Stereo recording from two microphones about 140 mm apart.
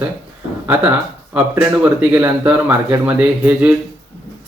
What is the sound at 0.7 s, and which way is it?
Speech, 15° right (ahead or behind).